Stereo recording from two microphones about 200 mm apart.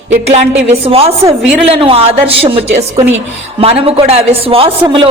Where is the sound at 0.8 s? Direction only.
30° right (ahead or behind).